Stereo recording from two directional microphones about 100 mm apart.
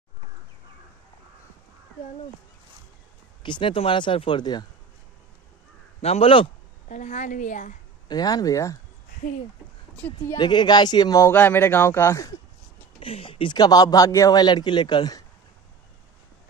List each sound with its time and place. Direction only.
3.4 s speech: 55° left (ahead or behind)
5.9 s a man's voice: 90° left; by 6.5 s 65° left (ahead or behind)
8.1 s speech: 40° left (ahead or behind)
10.3 s speech: 50° left (ahead or behind)
11.3 s speech: 20° left (ahead or behind)
13.0 s speech: 70° left (ahead or behind); by 15.2 s 45° left (ahead or behind)